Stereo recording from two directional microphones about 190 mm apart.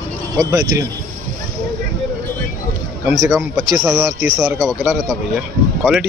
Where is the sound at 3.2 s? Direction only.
Centre (ahead or behind).